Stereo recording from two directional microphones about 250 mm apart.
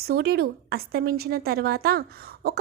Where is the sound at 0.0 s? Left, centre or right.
Right.